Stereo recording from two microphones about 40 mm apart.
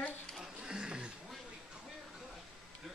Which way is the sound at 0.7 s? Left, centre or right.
Right.